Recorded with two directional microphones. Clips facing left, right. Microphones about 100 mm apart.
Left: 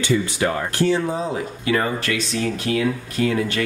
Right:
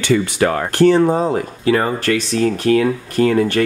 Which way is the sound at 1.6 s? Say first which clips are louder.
Right 5 dB; 40° right (ahead or behind).